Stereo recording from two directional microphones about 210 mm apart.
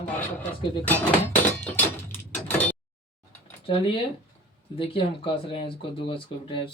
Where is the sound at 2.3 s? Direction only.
5° left (ahead or behind).